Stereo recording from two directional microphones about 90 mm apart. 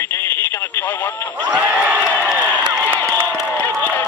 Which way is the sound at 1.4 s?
15° right (ahead or behind).